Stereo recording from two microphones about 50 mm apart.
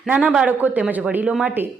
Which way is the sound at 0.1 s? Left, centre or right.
Right.